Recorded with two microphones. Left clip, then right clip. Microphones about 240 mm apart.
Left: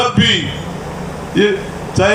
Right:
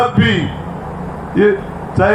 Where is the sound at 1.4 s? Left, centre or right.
Left.